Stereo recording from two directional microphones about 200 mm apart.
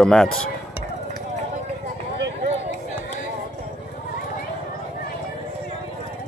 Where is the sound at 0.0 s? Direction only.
5° left (ahead or behind).